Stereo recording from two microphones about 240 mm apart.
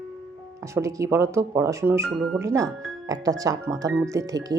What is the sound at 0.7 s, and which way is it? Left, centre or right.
Speech, centre.